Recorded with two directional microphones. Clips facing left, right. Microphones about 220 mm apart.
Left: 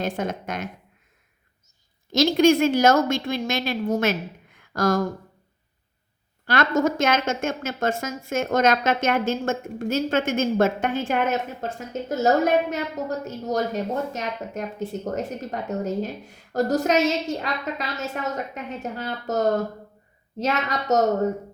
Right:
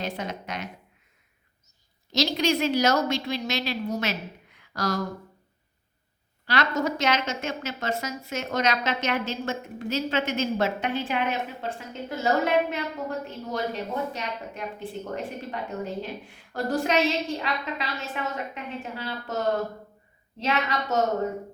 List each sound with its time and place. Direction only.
0.0 s a woman's voice: 50° left (ahead or behind)
2.1 s a woman's voice: 50° left (ahead or behind)
6.4 s a woman's voice: 50° left (ahead or behind)